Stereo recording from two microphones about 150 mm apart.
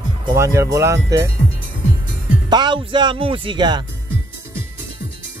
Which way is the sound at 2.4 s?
30° right (ahead or behind).